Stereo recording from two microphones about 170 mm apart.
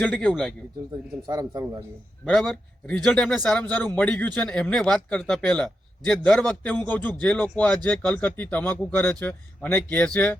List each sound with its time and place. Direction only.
0.0 s a man's voice: 5° left (ahead or behind)
1.3 s a man's voice: 20° right (ahead or behind)
2.2 s a man's voice: 5° left (ahead or behind)